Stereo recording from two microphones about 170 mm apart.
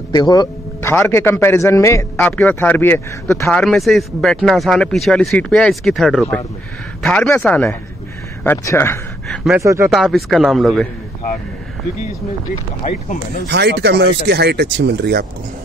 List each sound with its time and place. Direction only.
0.1 s speech: 25° left (ahead or behind)
2.1 s speech: 5° left (ahead or behind)
3.5 s speech: centre (ahead or behind)
9.6 s speech: 15° right (ahead or behind)
9.9 s speech: centre (ahead or behind)
12.8 s speech: 45° left (ahead or behind)
13.5 s speech: 85° right